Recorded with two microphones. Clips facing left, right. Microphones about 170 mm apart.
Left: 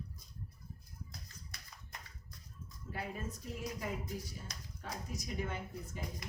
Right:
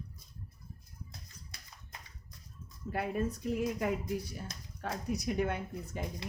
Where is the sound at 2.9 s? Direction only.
60° right (ahead or behind).